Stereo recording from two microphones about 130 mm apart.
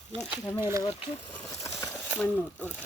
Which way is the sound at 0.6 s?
20° right (ahead or behind).